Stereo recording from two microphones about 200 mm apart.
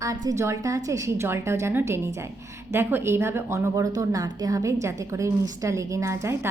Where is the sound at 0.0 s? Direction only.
15° right (ahead or behind).